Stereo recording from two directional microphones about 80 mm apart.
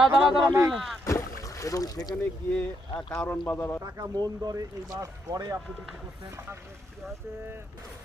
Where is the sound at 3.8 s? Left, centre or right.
Right.